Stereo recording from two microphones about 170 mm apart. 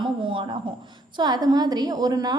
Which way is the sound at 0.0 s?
30° right (ahead or behind).